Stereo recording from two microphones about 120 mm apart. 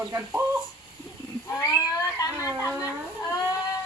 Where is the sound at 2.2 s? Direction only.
30° left (ahead or behind).